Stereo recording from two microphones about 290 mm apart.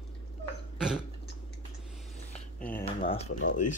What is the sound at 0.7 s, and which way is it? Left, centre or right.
Throat clearing, centre.